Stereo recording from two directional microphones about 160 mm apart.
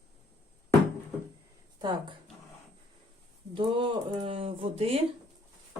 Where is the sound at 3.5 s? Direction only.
30° right (ahead or behind).